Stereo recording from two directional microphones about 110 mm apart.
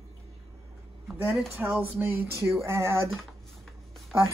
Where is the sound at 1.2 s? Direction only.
20° right (ahead or behind).